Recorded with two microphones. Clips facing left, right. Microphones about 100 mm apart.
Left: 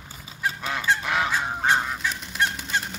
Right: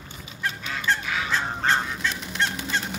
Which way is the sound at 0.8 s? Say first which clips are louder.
Left 2 dB; 10° left (ahead or behind).